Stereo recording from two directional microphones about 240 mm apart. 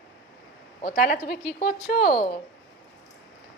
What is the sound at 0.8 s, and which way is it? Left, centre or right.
A woman's voice, left.